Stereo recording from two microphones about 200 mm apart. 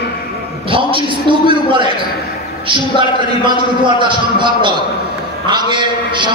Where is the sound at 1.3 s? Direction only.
25° right (ahead or behind).